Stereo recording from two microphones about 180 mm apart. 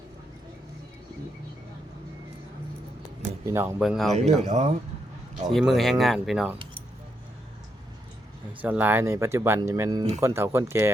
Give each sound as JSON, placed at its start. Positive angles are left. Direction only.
{"t": 3.4, "sound": "speech", "side_deg": -15}
{"t": 3.8, "sound": "speech", "side_deg": 0}
{"t": 4.1, "sound": "speech", "side_deg": -40}
{"t": 5.5, "sound": "speech", "side_deg": 0}
{"t": 8.6, "sound": "speech", "side_deg": -10}